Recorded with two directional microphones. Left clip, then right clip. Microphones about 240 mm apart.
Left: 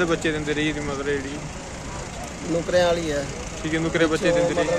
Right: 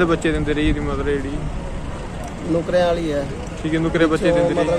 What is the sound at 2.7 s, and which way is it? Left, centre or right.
Speech, centre.